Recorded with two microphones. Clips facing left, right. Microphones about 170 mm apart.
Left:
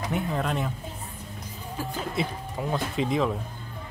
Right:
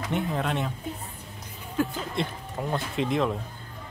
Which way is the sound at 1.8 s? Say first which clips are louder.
Right 8 dB; 60° right (ahead or behind).